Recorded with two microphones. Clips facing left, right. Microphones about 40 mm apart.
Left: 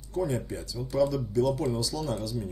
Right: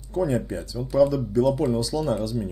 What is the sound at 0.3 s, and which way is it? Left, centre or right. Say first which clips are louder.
Speech: right 6 dB; right.